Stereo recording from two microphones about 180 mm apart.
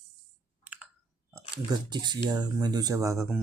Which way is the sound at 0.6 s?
10° right (ahead or behind).